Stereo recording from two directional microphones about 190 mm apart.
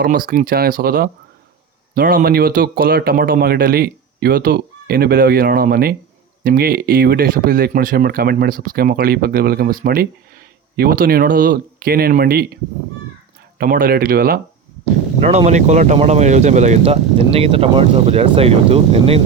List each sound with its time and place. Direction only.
0.0 s speech: 45° right (ahead or behind)
13.6 s speech: 50° right (ahead or behind)
15.2 s speech: 35° right (ahead or behind)